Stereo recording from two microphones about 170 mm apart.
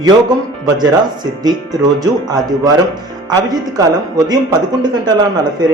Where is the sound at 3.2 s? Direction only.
25° right (ahead or behind).